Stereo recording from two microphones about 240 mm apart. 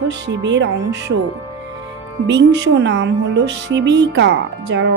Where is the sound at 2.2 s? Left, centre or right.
Right.